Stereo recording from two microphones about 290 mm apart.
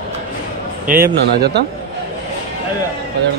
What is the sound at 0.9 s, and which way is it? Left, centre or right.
Speech, right.